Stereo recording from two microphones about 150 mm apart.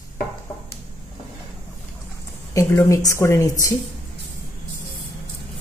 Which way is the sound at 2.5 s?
20° left (ahead or behind).